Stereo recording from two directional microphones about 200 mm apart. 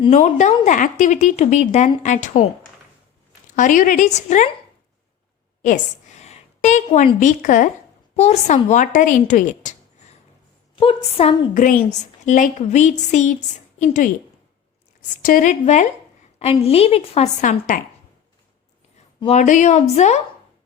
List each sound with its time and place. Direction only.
0.0 s a woman's voice: 35° left (ahead or behind)
3.5 s a woman's voice: 40° left (ahead or behind)
5.6 s a woman's voice: 40° left (ahead or behind)
11.5 s a woman's voice: 40° left (ahead or behind)
15.2 s a woman's voice: 45° left (ahead or behind)
19.2 s a woman's voice: 35° left (ahead or behind)